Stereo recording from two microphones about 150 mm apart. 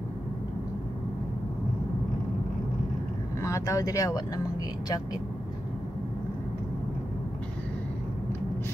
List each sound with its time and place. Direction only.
3.4 s speech: 20° left (ahead or behind)